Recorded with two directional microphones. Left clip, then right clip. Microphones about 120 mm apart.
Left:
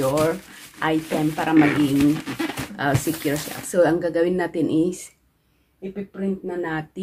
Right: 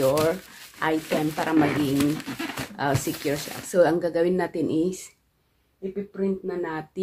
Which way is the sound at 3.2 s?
30° right (ahead or behind).